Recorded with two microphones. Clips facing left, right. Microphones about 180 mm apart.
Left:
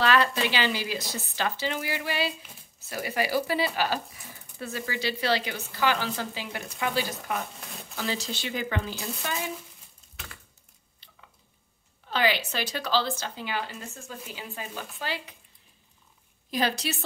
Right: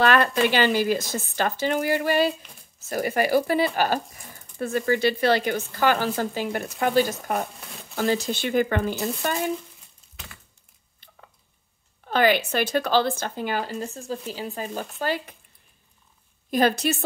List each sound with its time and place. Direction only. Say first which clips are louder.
0.0 s speech: right 4 dB; 55° right (ahead or behind)
11.0 s a sound: right 5 dB; 50° right (ahead or behind)
12.0 s speech: right 6 dB; 50° right (ahead or behind)
16.4 s speech: right 7 dB; 50° right (ahead or behind)